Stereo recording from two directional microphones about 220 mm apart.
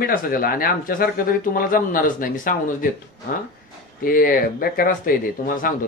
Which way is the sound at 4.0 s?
40° left (ahead or behind).